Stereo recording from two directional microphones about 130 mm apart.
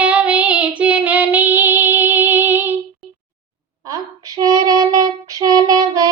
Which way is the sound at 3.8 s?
25° right (ahead or behind).